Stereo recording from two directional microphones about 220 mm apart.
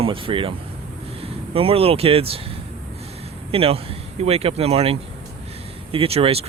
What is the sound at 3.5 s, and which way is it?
Speech, 25° right (ahead or behind).